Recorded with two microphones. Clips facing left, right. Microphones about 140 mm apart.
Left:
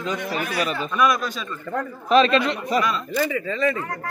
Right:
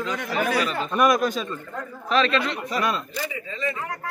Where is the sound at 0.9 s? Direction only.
45° right (ahead or behind).